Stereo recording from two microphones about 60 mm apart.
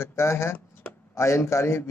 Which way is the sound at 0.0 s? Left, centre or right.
Left.